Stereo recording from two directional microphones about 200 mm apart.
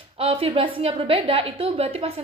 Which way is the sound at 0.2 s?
30° right (ahead or behind).